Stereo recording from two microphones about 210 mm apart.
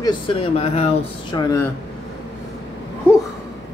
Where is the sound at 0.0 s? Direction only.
25° left (ahead or behind).